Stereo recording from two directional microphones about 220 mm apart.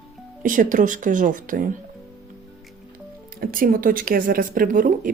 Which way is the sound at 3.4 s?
40° right (ahead or behind).